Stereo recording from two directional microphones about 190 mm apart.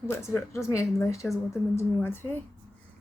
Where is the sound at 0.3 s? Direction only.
15° left (ahead or behind).